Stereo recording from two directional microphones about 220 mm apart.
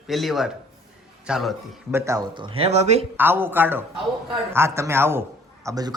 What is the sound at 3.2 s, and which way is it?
A woman's voice, 10° right (ahead or behind).